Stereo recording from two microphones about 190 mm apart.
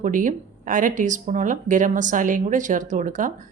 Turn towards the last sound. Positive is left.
turn(degrees=-40)  # may be behind; listen again after turning